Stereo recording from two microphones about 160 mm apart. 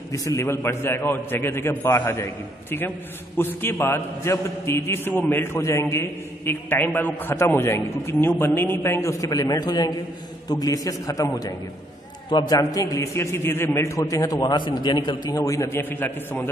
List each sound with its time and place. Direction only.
0.1 s a man's voice: 20° left (ahead or behind)
3.3 s a man's voice: 15° left (ahead or behind)